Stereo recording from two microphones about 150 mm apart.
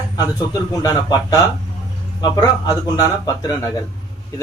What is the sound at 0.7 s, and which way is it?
Speech, 25° left (ahead or behind).